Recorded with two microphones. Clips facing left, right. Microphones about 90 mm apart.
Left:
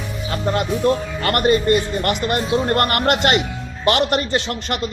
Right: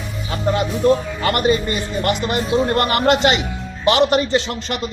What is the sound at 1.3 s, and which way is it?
A man's voice, 50° left (ahead or behind).